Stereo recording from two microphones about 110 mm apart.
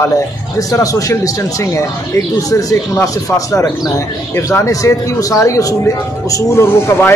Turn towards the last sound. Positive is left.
turn(degrees=20)  # may be behind; listen again after turning